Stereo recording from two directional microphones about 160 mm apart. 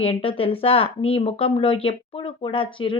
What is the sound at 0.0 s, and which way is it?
Speech, 35° left (ahead or behind).